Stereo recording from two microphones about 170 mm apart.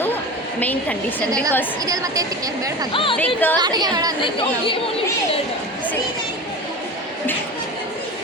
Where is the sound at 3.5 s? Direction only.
25° right (ahead or behind).